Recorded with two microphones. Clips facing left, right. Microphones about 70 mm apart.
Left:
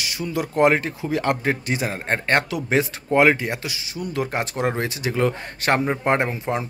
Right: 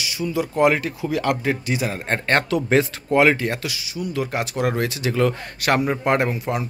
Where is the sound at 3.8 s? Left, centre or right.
Left.